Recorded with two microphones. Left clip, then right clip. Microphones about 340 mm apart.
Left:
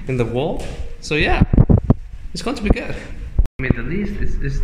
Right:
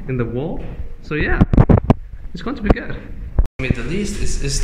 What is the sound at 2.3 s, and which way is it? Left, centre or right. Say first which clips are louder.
Speech: left 3 dB; centre.